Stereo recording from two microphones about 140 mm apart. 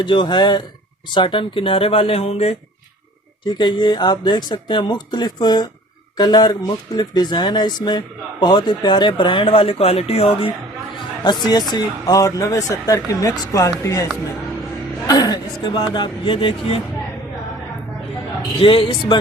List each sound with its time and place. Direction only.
0.0 s speech: 35° left (ahead or behind)
3.6 s speech: 30° left (ahead or behind)
11.2 s speech: 30° left (ahead or behind)
18.6 s speech: 40° left (ahead or behind)